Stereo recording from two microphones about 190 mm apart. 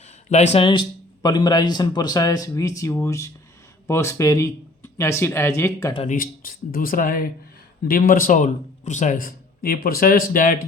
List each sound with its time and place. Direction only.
0.3 s speech: 35° left (ahead or behind); by 5.9 s 15° left (ahead or behind)
5.9 s speech: 30° left (ahead or behind)
6.1 s speech: 50° left (ahead or behind)